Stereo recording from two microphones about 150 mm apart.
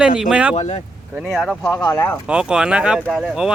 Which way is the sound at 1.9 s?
15° left (ahead or behind).